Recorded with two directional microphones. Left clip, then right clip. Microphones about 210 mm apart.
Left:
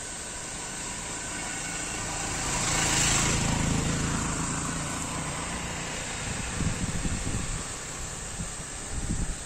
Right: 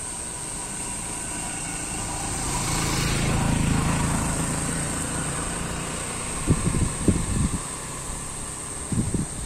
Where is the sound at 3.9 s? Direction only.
35° right (ahead or behind); by 7.0 s 50° right (ahead or behind).